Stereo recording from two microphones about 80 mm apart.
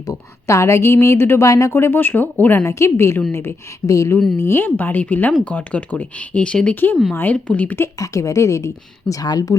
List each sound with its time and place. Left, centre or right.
0.0 s a woman's voice: left
2.6 s a woman's voice: left
4.4 s speech: left; by 6.7 s centre
7.1 s speech: left
7.3 s speech: centre
7.9 s speech: left